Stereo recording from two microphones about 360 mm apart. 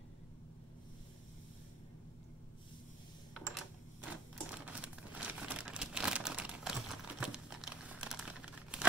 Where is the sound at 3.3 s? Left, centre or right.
Centre.